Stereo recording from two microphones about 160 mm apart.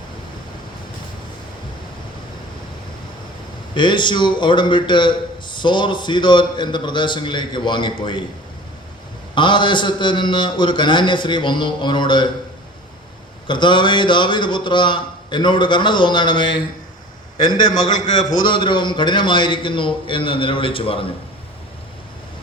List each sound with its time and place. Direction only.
3.8 s a man's voice: 30° left (ahead or behind)
9.3 s a man's voice: 30° left (ahead or behind)
13.5 s a man's voice: 30° left (ahead or behind)
18.4 s a man's voice: 30° left (ahead or behind)